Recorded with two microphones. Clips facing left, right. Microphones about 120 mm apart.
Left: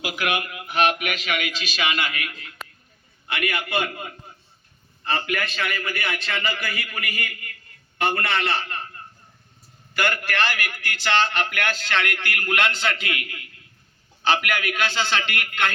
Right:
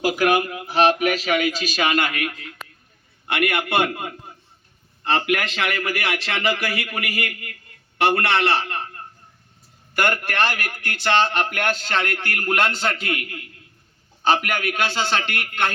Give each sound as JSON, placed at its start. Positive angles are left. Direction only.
{"t": 0.0, "sound": "a man's voice", "side_deg": -40}
{"t": 3.2, "sound": "a man's voice", "side_deg": -60}
{"t": 5.0, "sound": "a man's voice", "side_deg": -75}